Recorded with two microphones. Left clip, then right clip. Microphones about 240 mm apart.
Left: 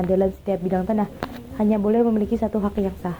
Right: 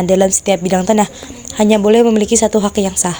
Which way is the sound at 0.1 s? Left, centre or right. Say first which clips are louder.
Right 10 dB; right.